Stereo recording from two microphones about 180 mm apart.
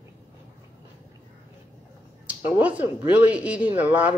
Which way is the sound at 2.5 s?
10° right (ahead or behind).